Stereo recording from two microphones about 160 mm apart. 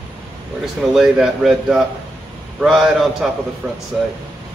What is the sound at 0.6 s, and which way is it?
Speech, 5° right (ahead or behind).